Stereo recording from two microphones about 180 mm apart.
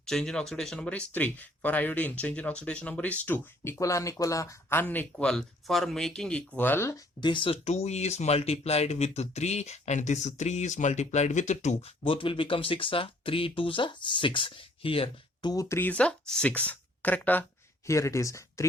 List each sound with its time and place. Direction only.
0.0 s speech: 5° left (ahead or behind)